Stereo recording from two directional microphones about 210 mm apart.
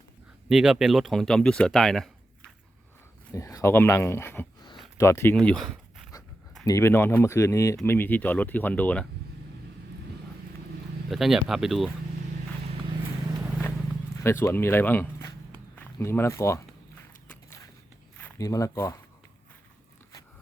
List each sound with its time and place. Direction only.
0.4 s speech: 5° right (ahead or behind)
3.3 s speech: 15° left (ahead or behind)
6.7 s speech: 15° left (ahead or behind)
11.1 s speech: centre (ahead or behind)
14.2 s speech: 10° left (ahead or behind)
18.2 s speech: 15° left (ahead or behind)